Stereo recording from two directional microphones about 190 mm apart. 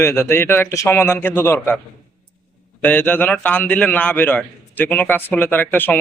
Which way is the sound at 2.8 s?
10° left (ahead or behind).